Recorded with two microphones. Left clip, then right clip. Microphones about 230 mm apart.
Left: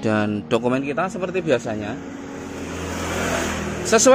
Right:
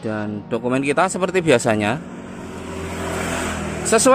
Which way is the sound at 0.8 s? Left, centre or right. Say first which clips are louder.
Right 5 dB; centre.